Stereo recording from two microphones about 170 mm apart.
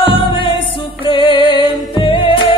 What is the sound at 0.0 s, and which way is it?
Music, 30° left (ahead or behind).